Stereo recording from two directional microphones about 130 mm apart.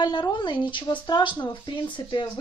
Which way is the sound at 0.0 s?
35° left (ahead or behind).